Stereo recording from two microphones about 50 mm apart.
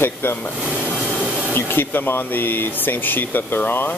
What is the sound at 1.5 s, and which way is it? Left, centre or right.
Speech, left.